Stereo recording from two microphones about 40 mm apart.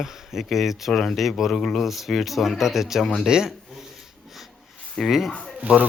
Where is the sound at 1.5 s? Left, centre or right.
Centre.